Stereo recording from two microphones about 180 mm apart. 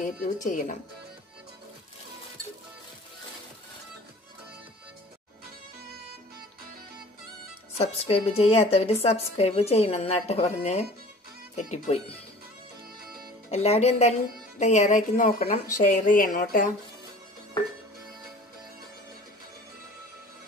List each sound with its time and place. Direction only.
0.0 s a woman's voice: 50° left (ahead or behind)
7.7 s a woman's voice: 35° left (ahead or behind)
13.5 s a woman's voice: 35° left (ahead or behind)